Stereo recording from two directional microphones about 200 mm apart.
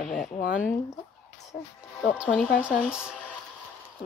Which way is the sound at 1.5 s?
50° left (ahead or behind).